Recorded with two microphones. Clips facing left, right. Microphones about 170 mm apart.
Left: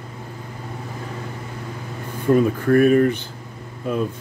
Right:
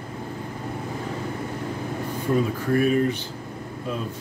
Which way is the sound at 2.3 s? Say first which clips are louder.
Left 7 dB; 55° left (ahead or behind).